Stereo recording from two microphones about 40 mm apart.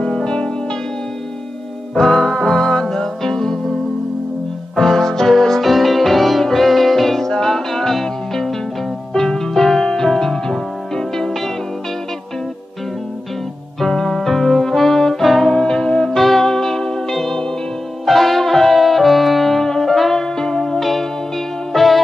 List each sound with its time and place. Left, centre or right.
0.0 s music: centre
2.0 s music: centre
4.7 s music: centre
13.7 s music: centre
16.2 s music: centre
18.0 s brass instrument: centre
20.7 s music: centre